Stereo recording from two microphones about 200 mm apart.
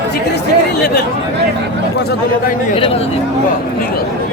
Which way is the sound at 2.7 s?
30° left (ahead or behind).